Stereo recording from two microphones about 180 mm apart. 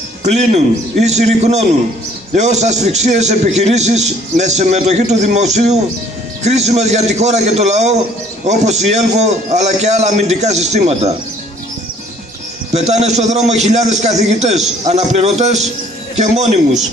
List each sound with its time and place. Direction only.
0.2 s a man's voice: 40° right (ahead or behind)
12.7 s a man's voice: 40° right (ahead or behind)